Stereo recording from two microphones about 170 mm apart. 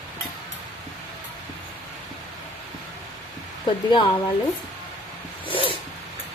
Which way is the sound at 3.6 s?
30° left (ahead or behind).